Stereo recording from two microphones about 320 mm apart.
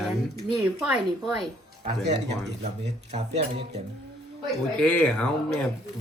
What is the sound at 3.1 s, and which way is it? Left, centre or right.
Speech, centre.